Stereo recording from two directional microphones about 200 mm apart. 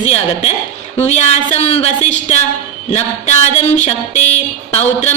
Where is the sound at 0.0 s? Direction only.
30° left (ahead or behind).